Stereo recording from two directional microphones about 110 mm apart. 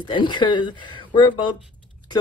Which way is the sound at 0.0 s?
45° left (ahead or behind).